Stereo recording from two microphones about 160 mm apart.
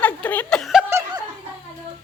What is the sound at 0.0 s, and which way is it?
Chuckle, 10° left (ahead or behind).